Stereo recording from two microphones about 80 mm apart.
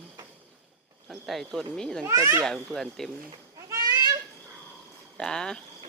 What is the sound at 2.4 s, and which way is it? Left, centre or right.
Speech, centre.